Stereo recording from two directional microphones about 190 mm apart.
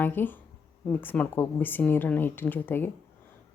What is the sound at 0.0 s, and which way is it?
A woman's voice, 10° left (ahead or behind).